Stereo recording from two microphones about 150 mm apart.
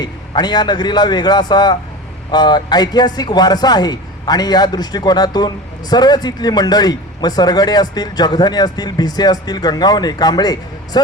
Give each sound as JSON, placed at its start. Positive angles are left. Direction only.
{"t": 0.0, "sound": "speech", "side_deg": 30}